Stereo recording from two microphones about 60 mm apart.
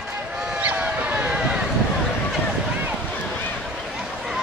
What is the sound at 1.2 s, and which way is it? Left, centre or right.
Boat, centre.